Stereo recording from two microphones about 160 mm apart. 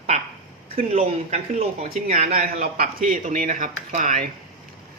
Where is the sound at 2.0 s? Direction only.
55° right (ahead or behind).